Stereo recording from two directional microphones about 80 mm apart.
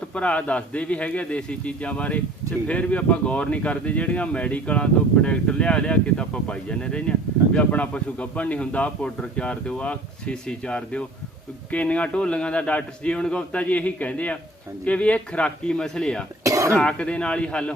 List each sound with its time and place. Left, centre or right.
0.1 s speech: centre
16.4 s cough: right
16.7 s speech: centre